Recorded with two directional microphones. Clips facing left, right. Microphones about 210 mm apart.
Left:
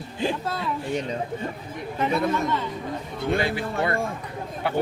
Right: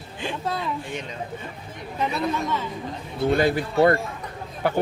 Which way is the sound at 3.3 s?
45° right (ahead or behind).